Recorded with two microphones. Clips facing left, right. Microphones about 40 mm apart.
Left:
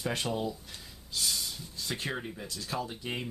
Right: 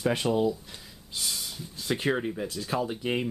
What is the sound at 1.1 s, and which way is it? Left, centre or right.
Snort, centre.